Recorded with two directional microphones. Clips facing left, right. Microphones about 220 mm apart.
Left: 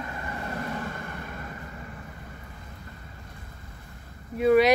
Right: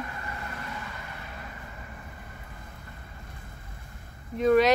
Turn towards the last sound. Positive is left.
turn(degrees=10)  # may be behind; listen again after turning